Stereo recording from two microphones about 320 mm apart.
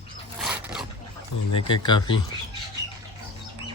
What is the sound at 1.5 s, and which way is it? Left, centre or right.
Speech, centre.